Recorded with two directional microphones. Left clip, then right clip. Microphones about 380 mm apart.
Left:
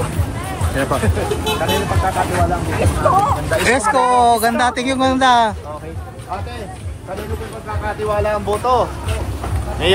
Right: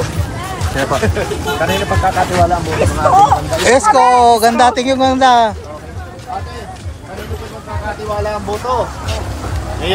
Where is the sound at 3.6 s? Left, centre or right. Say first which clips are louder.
Right 6 dB; centre.